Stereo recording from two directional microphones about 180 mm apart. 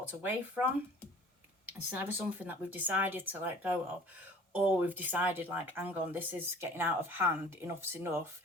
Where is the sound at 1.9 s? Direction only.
10° right (ahead or behind).